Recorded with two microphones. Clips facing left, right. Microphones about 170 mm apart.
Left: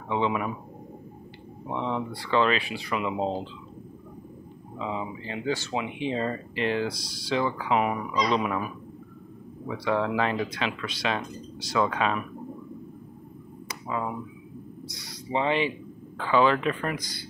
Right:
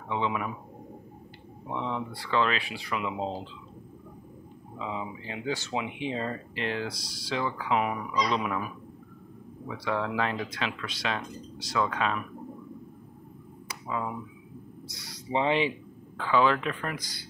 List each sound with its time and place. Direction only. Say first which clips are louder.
0.1 s speech: left 3 dB; 5° left (ahead or behind)
2.0 s speech: left 3 dB; centre (ahead or behind)
4.7 s speech: left 3 dB; 5° right (ahead or behind)
8.1 s speech: left 2 dB; 20° left (ahead or behind)
8.4 s speech: left 3 dB; 5° left (ahead or behind)
13.7 s a sound: left 2 dB; centre (ahead or behind)
14.9 s speech: left 3 dB; 5° right (ahead or behind)
15.3 s speech: even; 20° right (ahead or behind)
16.2 s speech: left 2 dB; centre (ahead or behind)